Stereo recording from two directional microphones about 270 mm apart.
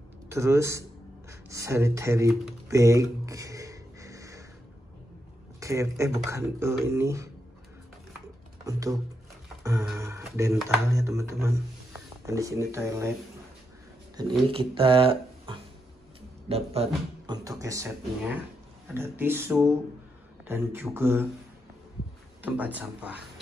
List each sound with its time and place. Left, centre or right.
0.3 s speech: centre
1.5 s typing: centre
5.6 s speech: centre
8.6 s speech: centre
9.6 s music: centre
10.9 s speech: centre
14.5 s speech: centre
17.3 s speech: centre
22.4 s speech: centre